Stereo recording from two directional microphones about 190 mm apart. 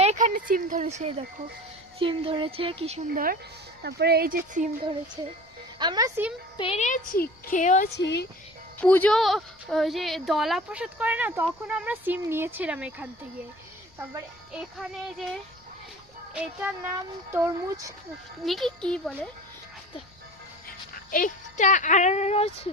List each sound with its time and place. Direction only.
0.0 s speech: 35° right (ahead or behind)
3.8 s speech: 60° right (ahead or behind)
5.8 s speech: 20° right (ahead or behind)
6.6 s speech: 35° left (ahead or behind)
7.9 s speech: 65° left (ahead or behind)
8.8 s a woman's voice: 10° left (ahead or behind); by 13.1 s 5° right (ahead or behind)
14.6 s a woman's voice: 5° right (ahead or behind)
18.4 s a woman's voice: centre (ahead or behind)
21.1 s speech: 45° left (ahead or behind)